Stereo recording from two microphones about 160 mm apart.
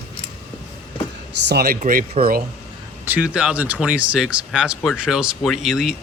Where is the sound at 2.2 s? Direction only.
45° right (ahead or behind).